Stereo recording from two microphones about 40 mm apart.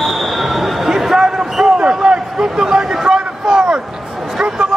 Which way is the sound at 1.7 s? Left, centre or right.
Right.